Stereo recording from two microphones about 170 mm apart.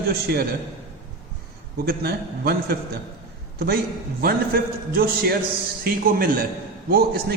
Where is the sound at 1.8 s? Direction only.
70° right (ahead or behind).